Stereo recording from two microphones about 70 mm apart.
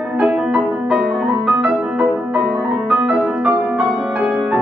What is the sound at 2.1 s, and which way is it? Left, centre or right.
Music, centre.